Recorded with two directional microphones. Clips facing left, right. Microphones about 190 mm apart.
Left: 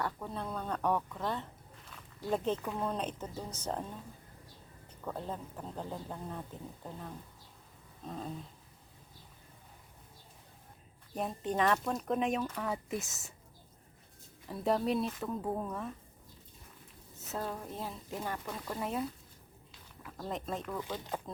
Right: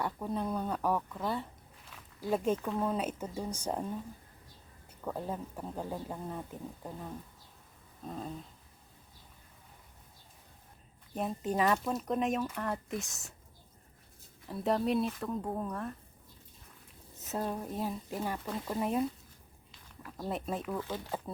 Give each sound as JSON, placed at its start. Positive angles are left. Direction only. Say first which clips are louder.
{"t": 0.0, "sound": "speech", "louder": "right 4 dB", "side_deg": -15}
{"t": 1.9, "sound": "a sound", "louder": "right 2 dB", "side_deg": -5}
{"t": 2.6, "sound": "speech", "louder": "right 3 dB", "side_deg": -5}
{"t": 5.0, "sound": "speech", "louder": "right 2 dB", "side_deg": -10}
{"t": 11.1, "sound": "speech", "louder": "right 1 dB", "side_deg": 0}
{"t": 14.4, "sound": "speech", "louder": "right 1 dB", "side_deg": 0}
{"t": 17.2, "sound": "speech", "louder": "right 3 dB", "side_deg": -15}
{"t": 20.0, "sound": "a sound", "louder": "right 2 dB", "side_deg": 0}
{"t": 20.2, "sound": "speech", "louder": "right 2 dB", "side_deg": -10}